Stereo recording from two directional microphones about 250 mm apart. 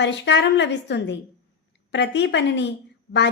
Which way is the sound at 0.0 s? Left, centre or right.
Left.